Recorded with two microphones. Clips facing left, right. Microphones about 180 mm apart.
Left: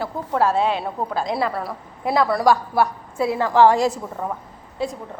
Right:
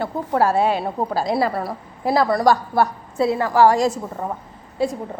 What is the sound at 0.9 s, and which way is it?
Speech, 30° right (ahead or behind).